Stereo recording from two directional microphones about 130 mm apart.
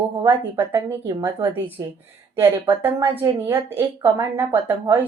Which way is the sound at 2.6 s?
15° right (ahead or behind).